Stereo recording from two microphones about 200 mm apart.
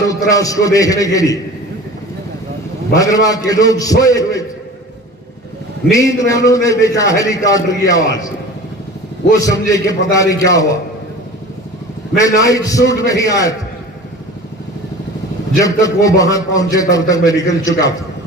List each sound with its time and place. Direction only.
0.1 s a man's voice: 15° left (ahead or behind)
3.0 s a man's voice: 15° left (ahead or behind)
5.9 s a man's voice: 15° left (ahead or behind)
9.4 s a man's voice: 15° left (ahead or behind)
12.1 s a man's voice: 15° left (ahead or behind)
15.6 s a man's voice: 15° left (ahead or behind)